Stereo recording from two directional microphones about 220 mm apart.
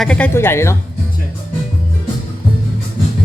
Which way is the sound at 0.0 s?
5° left (ahead or behind).